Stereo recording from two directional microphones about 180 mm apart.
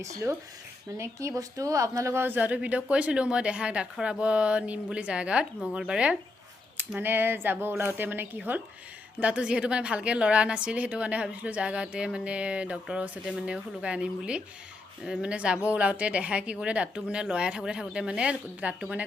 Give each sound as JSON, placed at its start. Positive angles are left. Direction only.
{"t": 0.2, "sound": "a woman's voice", "side_deg": -15}